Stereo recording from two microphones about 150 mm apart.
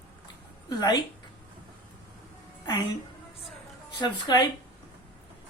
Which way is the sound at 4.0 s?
30° left (ahead or behind).